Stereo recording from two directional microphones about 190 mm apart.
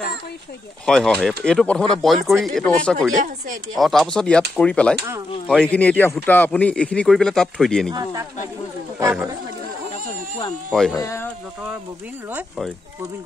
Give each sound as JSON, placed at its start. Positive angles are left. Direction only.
{"t": 0.8, "sound": "speech", "side_deg": 5}
{"t": 7.9, "sound": "speech", "side_deg": -20}
{"t": 10.7, "sound": "speech", "side_deg": 0}
{"t": 11.0, "sound": "speech", "side_deg": 15}
{"t": 12.3, "sound": "speech", "side_deg": -5}